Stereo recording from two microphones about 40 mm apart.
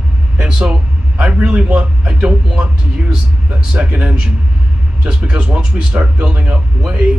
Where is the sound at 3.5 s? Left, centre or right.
Right.